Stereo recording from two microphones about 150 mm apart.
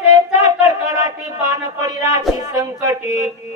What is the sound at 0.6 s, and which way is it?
A man's voice, 20° right (ahead or behind).